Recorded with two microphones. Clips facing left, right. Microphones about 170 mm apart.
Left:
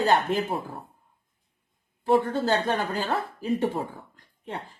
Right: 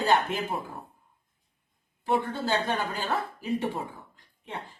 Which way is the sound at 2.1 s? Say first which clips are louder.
Left 5 dB; 40° left (ahead or behind).